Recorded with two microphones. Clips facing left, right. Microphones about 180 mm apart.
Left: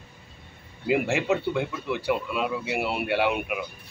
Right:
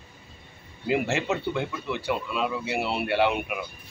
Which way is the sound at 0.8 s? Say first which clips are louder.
Left 2 dB; 10° left (ahead or behind).